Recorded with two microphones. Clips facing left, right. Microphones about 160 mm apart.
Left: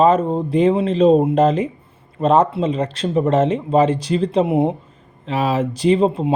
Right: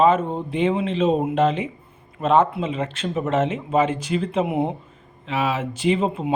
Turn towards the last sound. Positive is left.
turn(degrees=35)  # may be behind; listen again after turning